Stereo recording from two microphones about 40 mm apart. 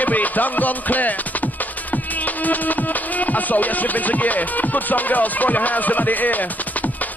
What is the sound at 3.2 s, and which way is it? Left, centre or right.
Speech, left.